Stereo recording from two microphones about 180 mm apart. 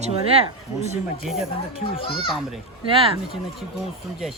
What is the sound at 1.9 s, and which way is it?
Speech, 30° left (ahead or behind).